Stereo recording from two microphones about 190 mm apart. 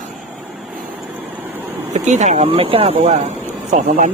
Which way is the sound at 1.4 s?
10° right (ahead or behind).